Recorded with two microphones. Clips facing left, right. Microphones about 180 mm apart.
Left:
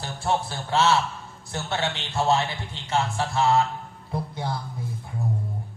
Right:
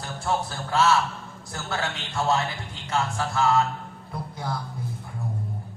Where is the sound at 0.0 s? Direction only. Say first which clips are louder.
Left 1 dB; 30° left (ahead or behind).